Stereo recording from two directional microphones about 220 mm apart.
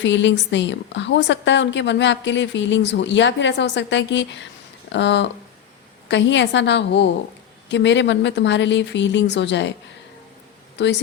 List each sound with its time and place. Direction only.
0.0 s a woman's voice: 55° left (ahead or behind)
10.8 s speech: 50° left (ahead or behind)